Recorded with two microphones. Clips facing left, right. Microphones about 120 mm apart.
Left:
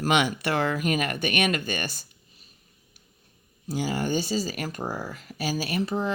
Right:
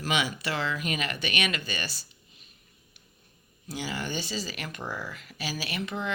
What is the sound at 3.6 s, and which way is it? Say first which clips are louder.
Speech: left 6 dB; 45° left (ahead or behind).